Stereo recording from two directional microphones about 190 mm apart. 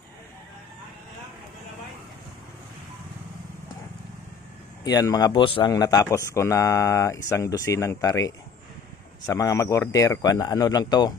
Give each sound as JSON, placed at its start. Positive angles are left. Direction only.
{"t": 4.8, "sound": "a man's voice", "side_deg": 20}